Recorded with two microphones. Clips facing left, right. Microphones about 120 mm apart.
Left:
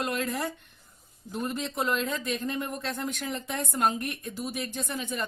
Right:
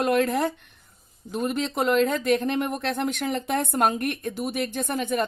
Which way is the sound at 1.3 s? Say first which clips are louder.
Right 5 dB; 75° right (ahead or behind).